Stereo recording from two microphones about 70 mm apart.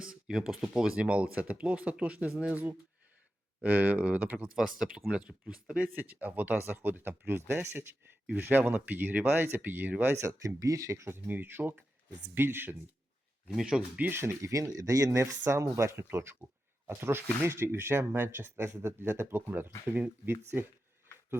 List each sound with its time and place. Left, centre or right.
0.0 s a sound: centre
0.8 s speech: centre
3.6 s speech: right
4.5 s speech: centre; by 10.2 s right
10.2 s speech: right
11.3 s speech: right
13.5 s speech: centre
14.1 s speech: right
14.5 s speech: right